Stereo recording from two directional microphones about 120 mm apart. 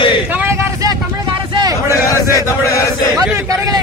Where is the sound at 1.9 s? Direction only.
25° left (ahead or behind).